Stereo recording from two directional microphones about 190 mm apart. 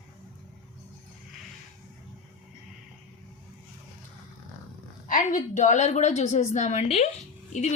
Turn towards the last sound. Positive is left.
turn(degrees=40)  # may be behind; listen again after turning